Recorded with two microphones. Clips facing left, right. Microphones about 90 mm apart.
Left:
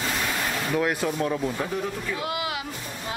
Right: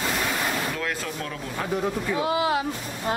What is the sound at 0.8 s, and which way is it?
Speech, 20° left (ahead or behind).